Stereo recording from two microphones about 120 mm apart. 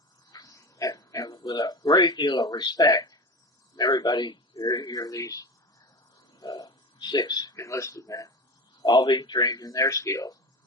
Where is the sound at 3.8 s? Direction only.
35° left (ahead or behind).